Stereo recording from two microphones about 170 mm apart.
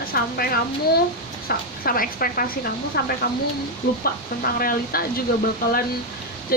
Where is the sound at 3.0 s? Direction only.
70° left (ahead or behind).